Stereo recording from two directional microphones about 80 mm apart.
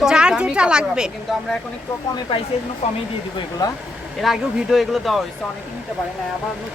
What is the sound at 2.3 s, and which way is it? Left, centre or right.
Speech, left.